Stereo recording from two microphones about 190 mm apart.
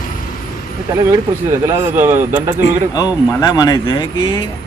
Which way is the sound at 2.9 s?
20° left (ahead or behind).